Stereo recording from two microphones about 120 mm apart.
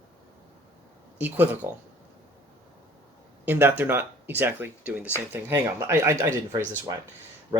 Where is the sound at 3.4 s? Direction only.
15° right (ahead or behind).